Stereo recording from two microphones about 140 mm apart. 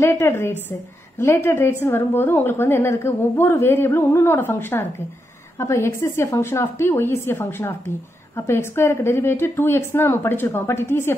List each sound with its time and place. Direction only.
0.0 s a woman's voice: 20° left (ahead or behind)